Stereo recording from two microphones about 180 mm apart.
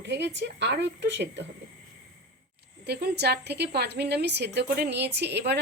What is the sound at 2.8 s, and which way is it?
Speech, 65° right (ahead or behind).